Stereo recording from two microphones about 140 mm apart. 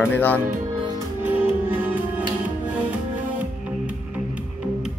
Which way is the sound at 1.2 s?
10° right (ahead or behind).